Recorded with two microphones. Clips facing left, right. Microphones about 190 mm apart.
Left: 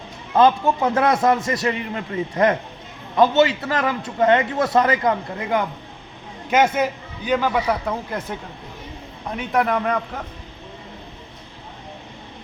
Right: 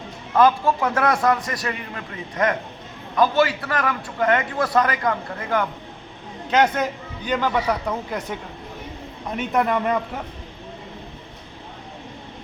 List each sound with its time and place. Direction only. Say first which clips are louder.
0.3 s a man's voice: left 1 dB; 25° left (ahead or behind); by 8.2 s centre (ahead or behind)
9.5 s a man's voice: left 1 dB; centre (ahead or behind)